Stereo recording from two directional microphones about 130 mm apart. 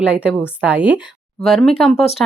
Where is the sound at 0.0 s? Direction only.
10° right (ahead or behind).